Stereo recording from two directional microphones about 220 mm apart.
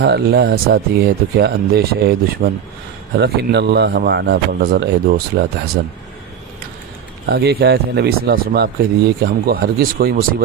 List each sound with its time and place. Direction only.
0.0 s speech: 50° right (ahead or behind)
7.3 s speech: 45° right (ahead or behind)